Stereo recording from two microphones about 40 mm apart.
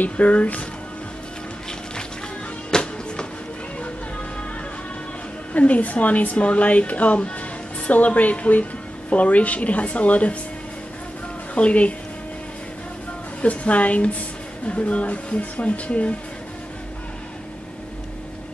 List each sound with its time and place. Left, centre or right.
0.0 s speech: left
2.7 s music: left
5.5 s speech: left
11.5 s speech: left
13.4 s speech: left